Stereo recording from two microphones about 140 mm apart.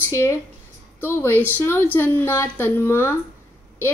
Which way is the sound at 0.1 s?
20° left (ahead or behind).